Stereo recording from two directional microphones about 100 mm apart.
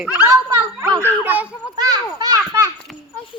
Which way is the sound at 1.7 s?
40° right (ahead or behind).